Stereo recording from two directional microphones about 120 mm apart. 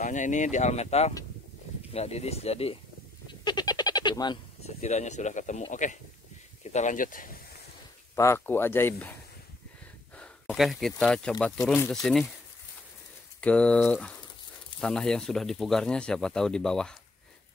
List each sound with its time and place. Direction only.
0.0 s speech: 90° left; by 2.8 s 60° left (ahead or behind)
3.4 s bird: 35° left (ahead or behind)
4.6 s speech: 65° left (ahead or behind); by 5.9 s 90° left
6.6 s speech: 75° left (ahead or behind)
8.2 s speech: 20° left (ahead or behind)
10.4 s speech: centre (ahead or behind)
13.4 s speech: 10° left (ahead or behind)